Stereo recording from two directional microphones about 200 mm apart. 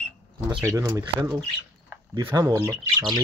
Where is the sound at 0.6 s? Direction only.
15° right (ahead or behind).